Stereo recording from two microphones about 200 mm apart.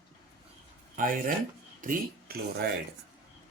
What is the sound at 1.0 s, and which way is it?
Speech, 45° right (ahead or behind).